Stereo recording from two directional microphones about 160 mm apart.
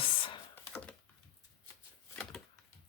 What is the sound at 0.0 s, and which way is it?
Computer keyboard, 35° left (ahead or behind).